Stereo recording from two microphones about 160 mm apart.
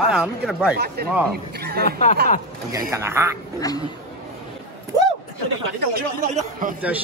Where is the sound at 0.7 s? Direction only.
80° right.